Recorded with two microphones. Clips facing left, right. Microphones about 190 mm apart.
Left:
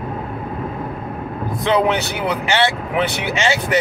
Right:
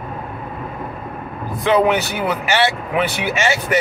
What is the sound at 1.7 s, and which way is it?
Speech, 20° left (ahead or behind).